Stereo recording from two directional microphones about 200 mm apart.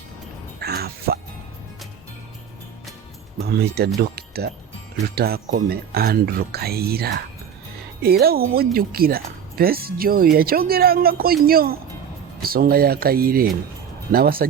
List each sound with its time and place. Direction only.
0.6 s music: 50° right (ahead or behind)
3.4 s speech: 50° right (ahead or behind)